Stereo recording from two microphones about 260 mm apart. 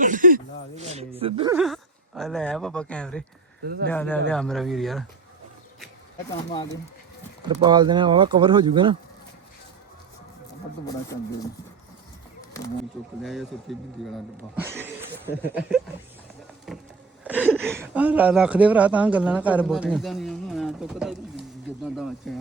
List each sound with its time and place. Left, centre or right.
0.0 s speech: right
1.5 s a man's voice: centre
3.6 s speech: right
3.8 s a man's voice: centre
7.4 s speech: centre
13.2 s a man's voice: centre
15.3 s a man's voice: centre
17.2 s a sound: centre
17.7 s a man's voice: centre